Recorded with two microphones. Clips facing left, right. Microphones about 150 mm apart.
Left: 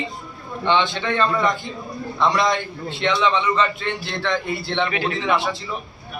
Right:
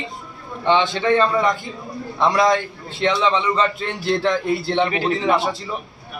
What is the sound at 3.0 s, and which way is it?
A man's voice, 35° right (ahead or behind).